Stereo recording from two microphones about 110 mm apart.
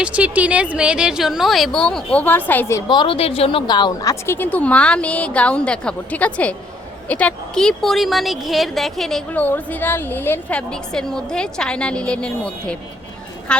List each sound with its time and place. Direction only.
0.0 s speech: 10° right (ahead or behind); by 2.8 s 20° left (ahead or behind)
2.9 s a woman's voice: 50° left (ahead or behind)
3.7 s a woman's voice: 40° left (ahead or behind)
4.1 s a woman's voice: 20° left (ahead or behind); by 9.4 s 5° left (ahead or behind)
9.4 s a woman's voice: 15° left (ahead or behind)
10.7 s a woman's voice: 5° left (ahead or behind)